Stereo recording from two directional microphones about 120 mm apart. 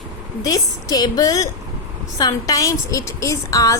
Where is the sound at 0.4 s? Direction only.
30° left (ahead or behind).